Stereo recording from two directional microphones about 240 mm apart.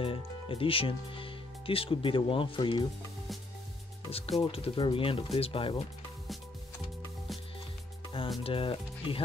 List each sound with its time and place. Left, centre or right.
0.0 s speech: left
4.4 s speech: left
8.2 s speech: left